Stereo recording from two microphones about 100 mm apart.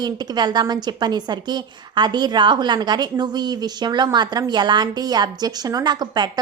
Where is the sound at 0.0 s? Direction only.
45° right (ahead or behind).